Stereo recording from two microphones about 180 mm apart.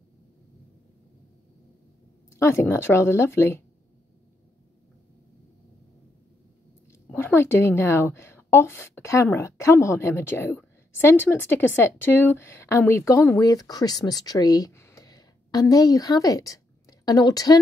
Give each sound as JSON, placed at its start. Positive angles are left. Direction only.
{"t": 2.3, "sound": "a woman's voice", "side_deg": 15}
{"t": 7.1, "sound": "a woman's voice", "side_deg": 10}